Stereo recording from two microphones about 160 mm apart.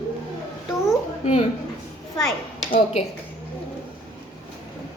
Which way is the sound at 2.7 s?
40° left (ahead or behind).